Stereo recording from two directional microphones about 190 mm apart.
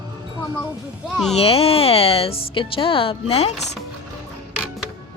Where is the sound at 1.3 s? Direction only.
30° left (ahead or behind).